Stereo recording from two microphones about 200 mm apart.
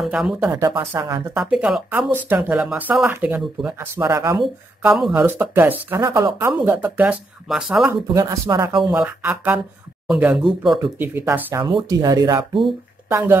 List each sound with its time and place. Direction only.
0.0 s speech: centre (ahead or behind); by 1.2 s 20° right (ahead or behind)
1.3 s speech: 5° right (ahead or behind)
4.0 s speech: 15° right (ahead or behind)
4.4 s speech: centre (ahead or behind)
8.1 s speech: 15° right (ahead or behind)
8.9 s speech: 5° right (ahead or behind)